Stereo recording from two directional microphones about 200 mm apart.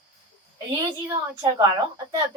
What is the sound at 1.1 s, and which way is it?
Speech, 15° right (ahead or behind).